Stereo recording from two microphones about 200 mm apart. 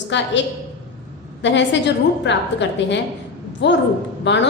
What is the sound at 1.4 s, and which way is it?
A woman's voice, 65° left (ahead or behind).